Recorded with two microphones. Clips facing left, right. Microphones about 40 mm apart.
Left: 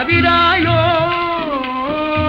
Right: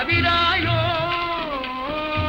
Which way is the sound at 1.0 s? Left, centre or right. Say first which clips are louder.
Left 7 dB; centre.